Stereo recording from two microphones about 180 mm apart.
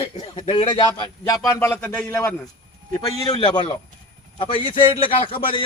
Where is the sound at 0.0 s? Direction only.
30° left (ahead or behind); by 2.3 s 10° left (ahead or behind).